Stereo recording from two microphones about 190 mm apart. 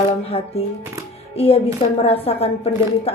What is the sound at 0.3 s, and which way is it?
A woman's voice, 30° left (ahead or behind).